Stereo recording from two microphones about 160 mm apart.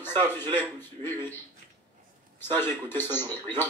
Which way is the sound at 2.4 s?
15° left (ahead or behind).